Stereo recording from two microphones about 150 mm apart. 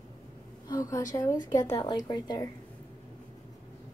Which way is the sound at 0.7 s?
20° left (ahead or behind).